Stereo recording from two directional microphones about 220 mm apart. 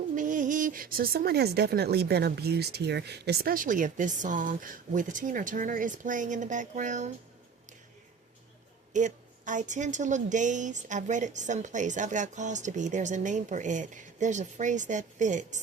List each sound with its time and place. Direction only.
0.2 s speech: 35° right (ahead or behind)
8.9 s speech: 35° right (ahead or behind)